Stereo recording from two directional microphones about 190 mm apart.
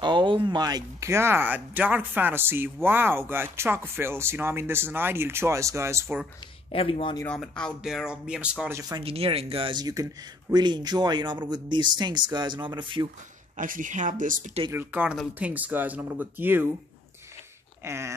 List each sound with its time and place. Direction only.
0.0 s speech: 25° right (ahead or behind)
6.7 s speech: 30° left (ahead or behind)
7.2 s speech: 5° left (ahead or behind); by 13.1 s 25° right (ahead or behind)
13.6 s speech: 45° right (ahead or behind)
14.7 s speech: 10° right (ahead or behind)
17.8 s speech: 15° right (ahead or behind)